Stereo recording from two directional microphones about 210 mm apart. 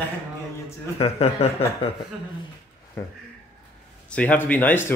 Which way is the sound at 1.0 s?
30° left (ahead or behind).